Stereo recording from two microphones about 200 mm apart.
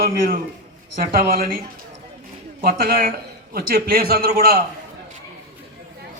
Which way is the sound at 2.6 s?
45° right (ahead or behind).